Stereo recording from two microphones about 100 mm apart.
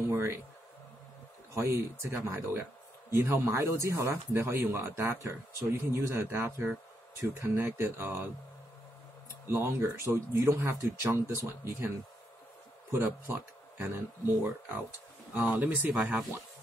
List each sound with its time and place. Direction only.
0.1 s speech: 25° right (ahead or behind)
1.5 s speech: 25° right (ahead or behind)
9.5 s speech: 30° right (ahead or behind)
12.9 s speech: 20° right (ahead or behind)
16.0 s speech: 15° right (ahead or behind)